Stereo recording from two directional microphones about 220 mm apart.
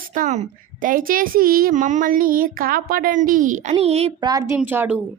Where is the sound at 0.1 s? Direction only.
35° right (ahead or behind).